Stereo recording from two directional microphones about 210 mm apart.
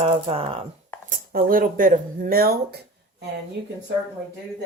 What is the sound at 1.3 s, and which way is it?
Speech, 40° right (ahead or behind).